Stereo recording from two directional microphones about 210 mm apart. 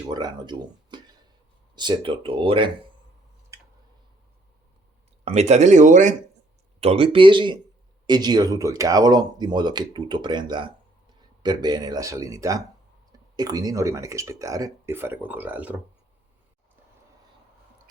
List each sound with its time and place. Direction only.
0.1 s speech: 20° right (ahead or behind)
5.2 s speech: 30° right (ahead or behind); by 15.8 s 5° right (ahead or behind)